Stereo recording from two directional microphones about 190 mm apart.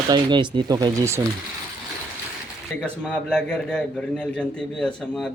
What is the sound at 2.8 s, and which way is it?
A man's voice, 5° left (ahead or behind).